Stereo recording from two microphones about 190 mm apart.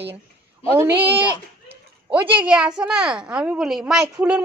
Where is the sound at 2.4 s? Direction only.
5° right (ahead or behind).